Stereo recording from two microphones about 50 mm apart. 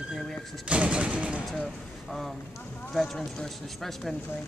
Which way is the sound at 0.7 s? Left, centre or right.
Right.